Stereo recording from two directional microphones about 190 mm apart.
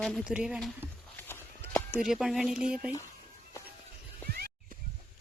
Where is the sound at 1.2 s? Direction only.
10° left (ahead or behind).